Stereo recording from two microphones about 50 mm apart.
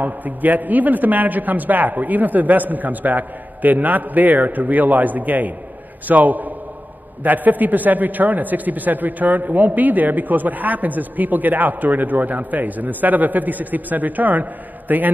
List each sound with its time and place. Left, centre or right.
0.0 s a man's voice: right